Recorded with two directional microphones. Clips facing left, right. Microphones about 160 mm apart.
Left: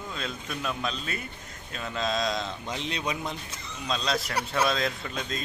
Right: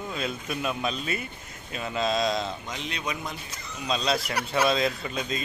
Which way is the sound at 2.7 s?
30° left (ahead or behind).